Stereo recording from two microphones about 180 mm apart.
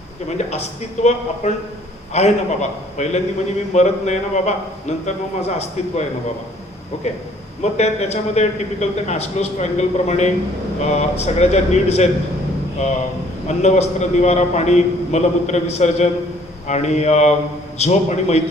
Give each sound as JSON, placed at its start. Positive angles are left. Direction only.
{"t": 0.3, "sound": "a man's voice", "side_deg": 40}
{"t": 7.6, "sound": "a man's voice", "side_deg": 35}
{"t": 13.5, "sound": "a man's voice", "side_deg": 40}